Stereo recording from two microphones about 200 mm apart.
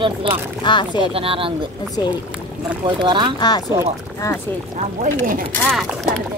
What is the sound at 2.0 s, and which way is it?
Speech, 20° left (ahead or behind).